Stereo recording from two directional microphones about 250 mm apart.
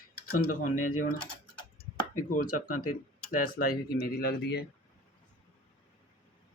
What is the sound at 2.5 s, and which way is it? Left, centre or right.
Speech, left.